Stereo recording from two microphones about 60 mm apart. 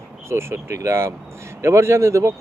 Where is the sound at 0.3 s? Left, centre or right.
Right.